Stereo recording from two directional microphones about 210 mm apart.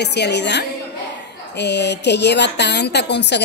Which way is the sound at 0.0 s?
55° left (ahead or behind).